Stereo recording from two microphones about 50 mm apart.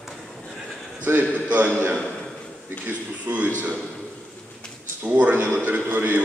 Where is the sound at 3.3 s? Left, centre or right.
Right.